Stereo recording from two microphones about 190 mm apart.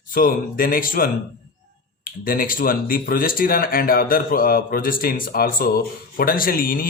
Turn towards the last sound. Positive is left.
turn(degrees=50)  # may be behind; listen again after turning